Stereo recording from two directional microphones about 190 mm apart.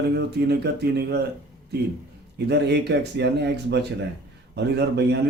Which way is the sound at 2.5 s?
60° right (ahead or behind).